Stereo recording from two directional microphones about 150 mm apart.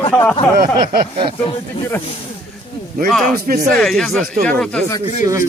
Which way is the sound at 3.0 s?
Centre (ahead or behind).